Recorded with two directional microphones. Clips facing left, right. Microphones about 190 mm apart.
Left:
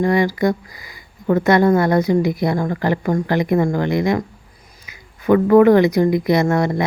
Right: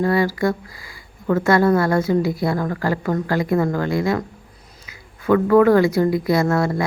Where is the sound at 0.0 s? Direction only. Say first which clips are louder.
Left 2 dB; 15° left (ahead or behind).